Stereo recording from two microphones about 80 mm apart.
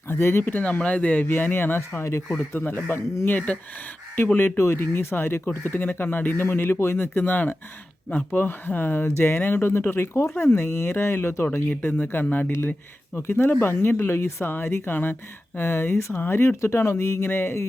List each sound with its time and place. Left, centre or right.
0.1 s speech: left
4.4 s speech: left
11.7 s speech: left
12.5 s speech: left
16.1 s speech: left
16.6 s speech: left